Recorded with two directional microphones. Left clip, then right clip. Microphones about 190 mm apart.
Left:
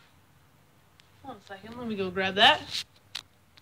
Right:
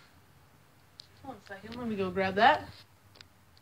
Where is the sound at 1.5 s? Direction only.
20° left (ahead or behind).